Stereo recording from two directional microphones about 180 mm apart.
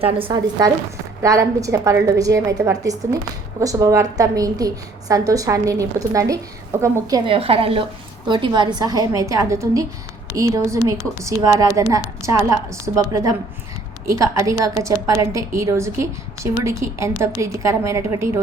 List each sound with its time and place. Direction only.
0.0 s a woman's voice: 30° right (ahead or behind); by 6.9 s 15° right (ahead or behind)
7.3 s a woman's voice: 30° right (ahead or behind); by 18.4 s 15° right (ahead or behind)